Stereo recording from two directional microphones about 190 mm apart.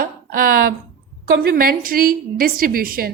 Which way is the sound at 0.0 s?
50° right (ahead or behind).